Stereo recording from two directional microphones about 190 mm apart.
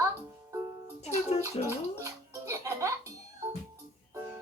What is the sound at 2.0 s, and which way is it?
Music, 15° right (ahead or behind).